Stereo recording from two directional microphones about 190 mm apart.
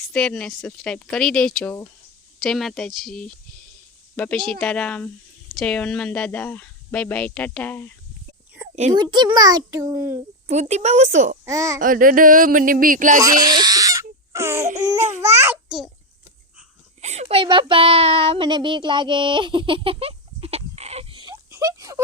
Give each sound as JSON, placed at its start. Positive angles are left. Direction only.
{"t": 0.1, "sound": "speech", "side_deg": 5}
{"t": 8.9, "sound": "a child's voice", "side_deg": -20}
{"t": 10.5, "sound": "a woman's voice", "side_deg": -35}
{"t": 11.4, "sound": "a child's voice", "side_deg": -15}
{"t": 11.8, "sound": "a sound", "side_deg": -45}
{"t": 13.2, "sound": "crying", "side_deg": -20}
{"t": 14.7, "sound": "a woman's voice", "side_deg": -40}
{"t": 15.2, "sound": "a child's voice", "side_deg": -15}
{"t": 17.0, "sound": "speech", "side_deg": -35}